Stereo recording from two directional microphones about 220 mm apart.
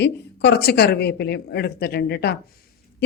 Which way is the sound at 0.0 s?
50° left (ahead or behind).